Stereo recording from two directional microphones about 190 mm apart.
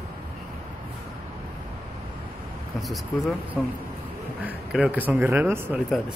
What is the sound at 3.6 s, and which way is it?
Speech, 5° right (ahead or behind).